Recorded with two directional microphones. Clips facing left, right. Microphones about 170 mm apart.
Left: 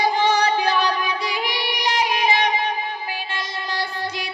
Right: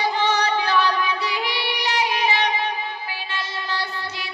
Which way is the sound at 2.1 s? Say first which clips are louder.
Left 2 dB; 45° left (ahead or behind).